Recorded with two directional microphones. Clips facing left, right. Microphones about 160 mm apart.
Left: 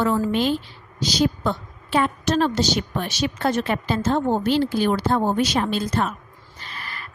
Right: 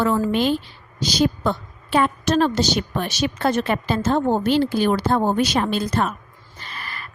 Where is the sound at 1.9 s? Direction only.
55° right (ahead or behind).